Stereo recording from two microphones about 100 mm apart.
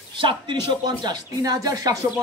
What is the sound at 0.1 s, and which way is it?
Speech, 55° right (ahead or behind).